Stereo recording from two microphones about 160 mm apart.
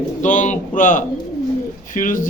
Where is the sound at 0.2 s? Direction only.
50° left (ahead or behind).